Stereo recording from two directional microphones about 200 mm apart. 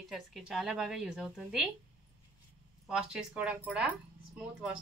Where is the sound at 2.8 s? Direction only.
5° right (ahead or behind).